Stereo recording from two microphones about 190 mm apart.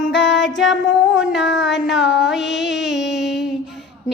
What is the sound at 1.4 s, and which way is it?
Music, 65° left (ahead or behind).